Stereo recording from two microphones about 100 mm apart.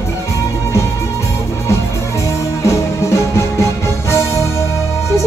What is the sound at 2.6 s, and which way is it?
Music, 30° left (ahead or behind).